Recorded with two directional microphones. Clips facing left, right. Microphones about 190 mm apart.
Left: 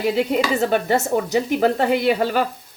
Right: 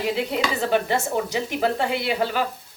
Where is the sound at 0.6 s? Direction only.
45° left (ahead or behind).